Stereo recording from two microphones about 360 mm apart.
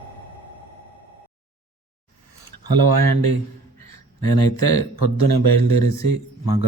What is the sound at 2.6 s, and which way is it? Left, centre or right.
Speech, right.